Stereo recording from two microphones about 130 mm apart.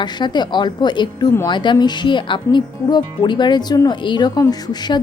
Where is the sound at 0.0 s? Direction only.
35° left (ahead or behind).